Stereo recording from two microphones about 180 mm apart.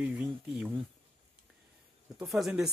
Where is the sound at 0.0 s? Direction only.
5° right (ahead or behind).